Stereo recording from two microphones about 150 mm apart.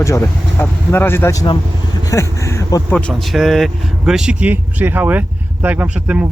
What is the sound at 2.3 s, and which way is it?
Speech, 20° left (ahead or behind).